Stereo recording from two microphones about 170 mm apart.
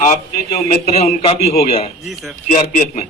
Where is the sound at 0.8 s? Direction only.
40° left (ahead or behind).